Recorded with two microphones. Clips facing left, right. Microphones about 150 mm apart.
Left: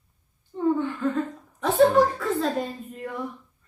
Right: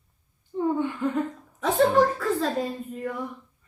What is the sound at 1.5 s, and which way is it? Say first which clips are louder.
A woman's voice: left 2 dB; centre (ahead or behind).